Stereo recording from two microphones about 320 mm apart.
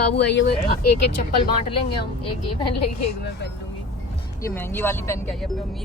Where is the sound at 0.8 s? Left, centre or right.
Left.